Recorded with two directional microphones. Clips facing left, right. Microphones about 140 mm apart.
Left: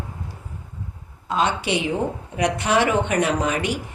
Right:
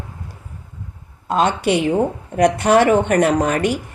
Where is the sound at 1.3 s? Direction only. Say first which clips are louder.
Right 5 dB; 50° right (ahead or behind).